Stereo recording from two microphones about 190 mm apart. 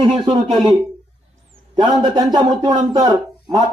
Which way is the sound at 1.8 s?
20° right (ahead or behind).